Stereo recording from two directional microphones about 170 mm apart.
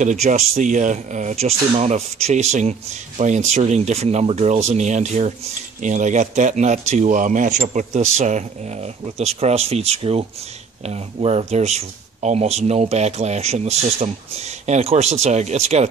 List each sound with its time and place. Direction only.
0.0 s speech: 45° right (ahead or behind)